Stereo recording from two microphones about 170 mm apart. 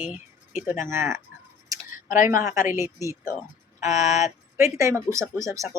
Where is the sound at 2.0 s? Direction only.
50° left (ahead or behind).